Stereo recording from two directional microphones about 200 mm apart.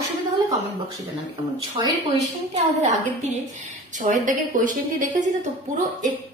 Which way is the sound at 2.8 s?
35° right (ahead or behind).